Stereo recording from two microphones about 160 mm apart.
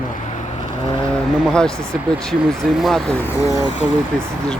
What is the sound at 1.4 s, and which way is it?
Speech, 5° left (ahead or behind).